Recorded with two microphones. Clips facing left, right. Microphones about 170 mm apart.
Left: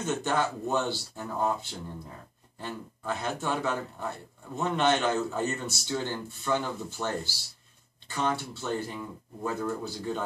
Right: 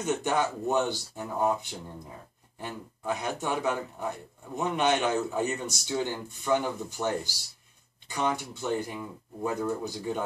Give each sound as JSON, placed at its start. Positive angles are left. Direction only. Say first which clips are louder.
{"t": 0.0, "sound": "speech", "louder": "right 1 dB", "side_deg": -15}